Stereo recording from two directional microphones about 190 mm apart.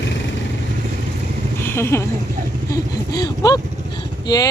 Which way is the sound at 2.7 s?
20° left (ahead or behind).